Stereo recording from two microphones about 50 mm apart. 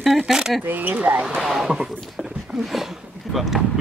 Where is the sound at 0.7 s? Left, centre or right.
Right.